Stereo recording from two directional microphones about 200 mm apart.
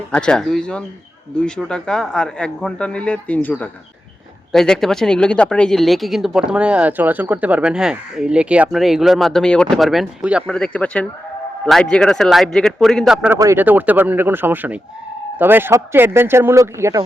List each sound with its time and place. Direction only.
0.1 s speech: 5° left (ahead or behind); by 17.0 s 15° right (ahead or behind)